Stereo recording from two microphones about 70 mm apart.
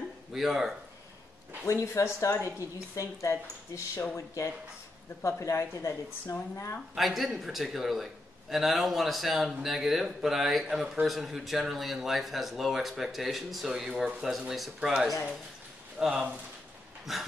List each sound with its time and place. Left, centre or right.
0.3 s a man's voice: centre
1.7 s speech: left
7.0 s a man's voice: centre